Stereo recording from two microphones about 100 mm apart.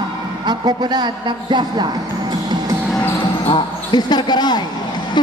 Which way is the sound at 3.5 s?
50° left (ahead or behind).